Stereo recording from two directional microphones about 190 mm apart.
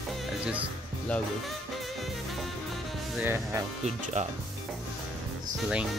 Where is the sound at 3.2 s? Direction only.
10° right (ahead or behind).